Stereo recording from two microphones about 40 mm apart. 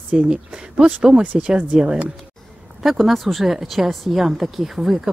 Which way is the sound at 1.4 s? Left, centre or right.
Right.